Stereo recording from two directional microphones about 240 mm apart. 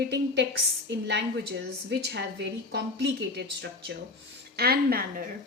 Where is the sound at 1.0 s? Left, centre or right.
Right.